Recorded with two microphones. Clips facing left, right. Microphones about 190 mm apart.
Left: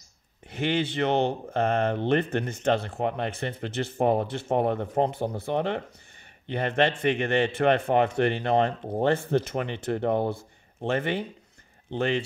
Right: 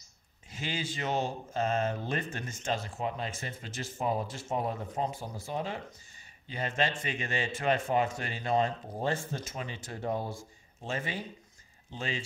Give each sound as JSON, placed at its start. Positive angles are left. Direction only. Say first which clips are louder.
{"t": 0.5, "sound": "speech", "louder": "left 10 dB", "side_deg": 60}